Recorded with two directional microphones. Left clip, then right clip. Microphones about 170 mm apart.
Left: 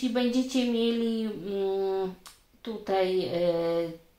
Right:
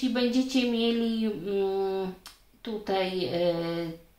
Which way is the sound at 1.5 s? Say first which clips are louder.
Even; 30° left (ahead or behind).